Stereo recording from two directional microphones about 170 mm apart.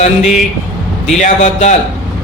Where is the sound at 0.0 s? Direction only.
40° left (ahead or behind).